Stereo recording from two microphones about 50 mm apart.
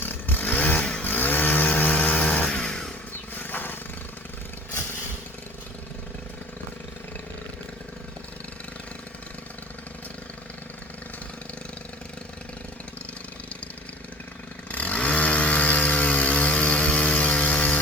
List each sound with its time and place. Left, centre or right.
0.0 s chainsaw: left
1.0 s chainsaw: left; by 2.9 s centre
3.3 s wild animals: left
14.7 s chainsaw: left